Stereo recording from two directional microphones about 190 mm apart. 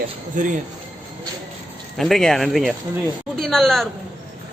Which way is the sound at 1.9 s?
Centre (ahead or behind).